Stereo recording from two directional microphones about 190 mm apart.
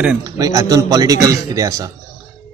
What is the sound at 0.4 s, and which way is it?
A man's voice, 20° right (ahead or behind).